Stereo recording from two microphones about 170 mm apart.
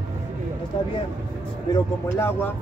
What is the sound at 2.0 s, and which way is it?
Speech, 15° left (ahead or behind).